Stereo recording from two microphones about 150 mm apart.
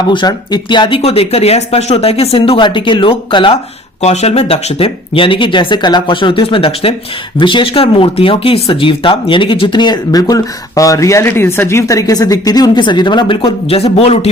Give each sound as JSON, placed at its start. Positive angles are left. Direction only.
{"t": 0.1, "sound": "speech", "side_deg": 30}
{"t": 4.0, "sound": "speech", "side_deg": 45}